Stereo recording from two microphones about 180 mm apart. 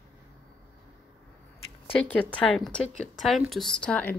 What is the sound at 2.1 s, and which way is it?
Speech, 5° left (ahead or behind).